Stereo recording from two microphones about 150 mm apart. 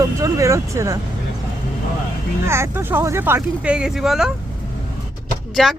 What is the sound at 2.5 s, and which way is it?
Speech, 15° right (ahead or behind).